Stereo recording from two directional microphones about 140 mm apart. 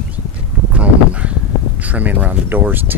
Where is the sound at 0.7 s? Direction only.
10° right (ahead or behind).